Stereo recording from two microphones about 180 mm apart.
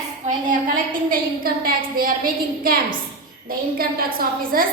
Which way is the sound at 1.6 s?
55° right (ahead or behind).